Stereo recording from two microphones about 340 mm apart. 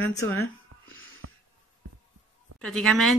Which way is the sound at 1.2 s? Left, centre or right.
Right.